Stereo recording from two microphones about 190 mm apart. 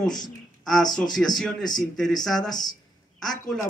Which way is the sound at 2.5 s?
20° left (ahead or behind).